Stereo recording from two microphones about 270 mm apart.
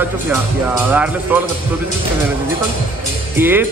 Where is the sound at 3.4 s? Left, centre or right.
Centre.